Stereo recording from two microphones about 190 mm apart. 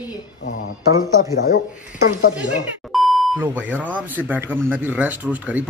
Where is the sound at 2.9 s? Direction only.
Centre (ahead or behind).